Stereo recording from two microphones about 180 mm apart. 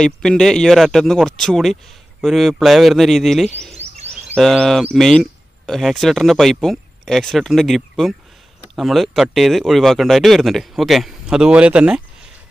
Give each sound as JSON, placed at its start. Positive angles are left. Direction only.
{"t": 0.0, "sound": "speech", "side_deg": 5}
{"t": 3.7, "sound": "a sound", "side_deg": -35}
{"t": 4.4, "sound": "speech", "side_deg": 0}